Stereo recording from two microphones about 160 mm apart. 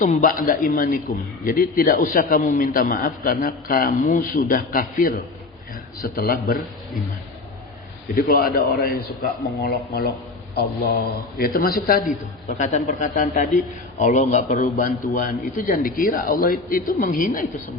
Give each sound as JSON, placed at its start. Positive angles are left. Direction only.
{"t": 0.0, "sound": "a man's voice", "side_deg": 55}
{"t": 8.1, "sound": "a man's voice", "side_deg": 70}
{"t": 12.5, "sound": "a man's voice", "side_deg": 50}